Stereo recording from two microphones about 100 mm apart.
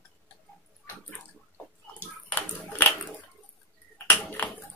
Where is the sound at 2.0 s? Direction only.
15° left (ahead or behind).